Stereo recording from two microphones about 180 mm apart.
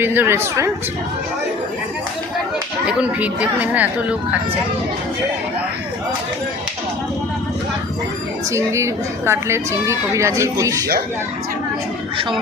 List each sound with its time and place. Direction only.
0.0 s speech: 10° right (ahead or behind)
2.8 s speech: 5° right (ahead or behind)
8.5 s speech: 15° right (ahead or behind)